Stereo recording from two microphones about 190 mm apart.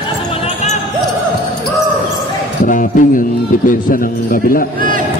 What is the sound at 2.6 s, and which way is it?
A man's voice, 45° left (ahead or behind).